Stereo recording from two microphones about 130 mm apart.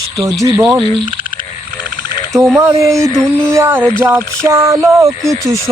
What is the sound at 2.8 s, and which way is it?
Speech, 25° right (ahead or behind).